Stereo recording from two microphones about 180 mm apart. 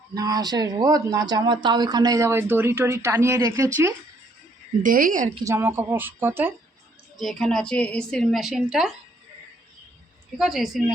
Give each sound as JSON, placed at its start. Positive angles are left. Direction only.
{"t": 0.1, "sound": "speech", "side_deg": -20}
{"t": 4.8, "sound": "a woman's voice", "side_deg": -50}
{"t": 5.5, "sound": "speech", "side_deg": -15}
{"t": 7.2, "sound": "a woman's voice", "side_deg": 0}
{"t": 10.3, "sound": "a woman's voice", "side_deg": 0}